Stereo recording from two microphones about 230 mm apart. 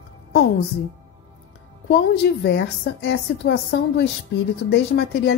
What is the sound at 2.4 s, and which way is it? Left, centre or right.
A woman's voice, left.